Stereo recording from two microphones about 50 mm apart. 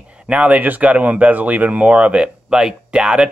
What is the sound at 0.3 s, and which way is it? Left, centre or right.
Speech, right.